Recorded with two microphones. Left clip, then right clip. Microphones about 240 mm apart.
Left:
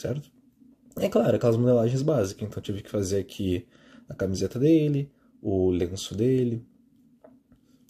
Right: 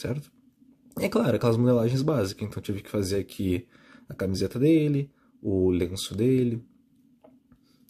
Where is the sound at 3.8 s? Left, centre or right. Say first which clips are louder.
Left 1 dB; centre.